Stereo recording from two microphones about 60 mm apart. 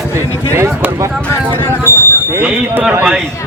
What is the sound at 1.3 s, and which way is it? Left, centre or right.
Speech, left.